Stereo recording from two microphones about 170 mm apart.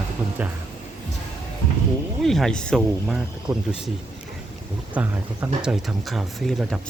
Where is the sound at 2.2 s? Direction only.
Centre (ahead or behind).